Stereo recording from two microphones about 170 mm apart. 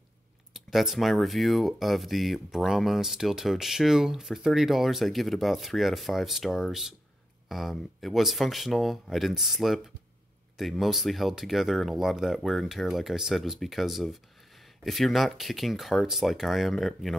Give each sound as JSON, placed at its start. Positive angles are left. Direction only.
{"t": 0.7, "sound": "speech", "side_deg": 0}